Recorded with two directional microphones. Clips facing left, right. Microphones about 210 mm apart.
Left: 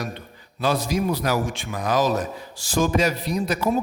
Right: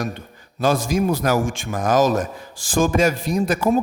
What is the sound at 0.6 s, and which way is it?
Speech, 45° right (ahead or behind).